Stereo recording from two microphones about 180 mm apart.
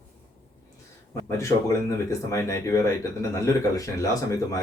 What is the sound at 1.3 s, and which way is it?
Speech, 15° left (ahead or behind).